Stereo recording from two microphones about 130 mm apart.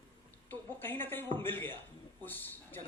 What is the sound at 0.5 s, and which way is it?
Speech, 15° left (ahead or behind).